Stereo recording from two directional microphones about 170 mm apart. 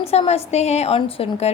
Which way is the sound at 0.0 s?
35° left (ahead or behind).